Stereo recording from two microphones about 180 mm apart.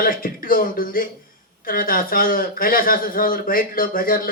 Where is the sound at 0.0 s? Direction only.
50° left (ahead or behind).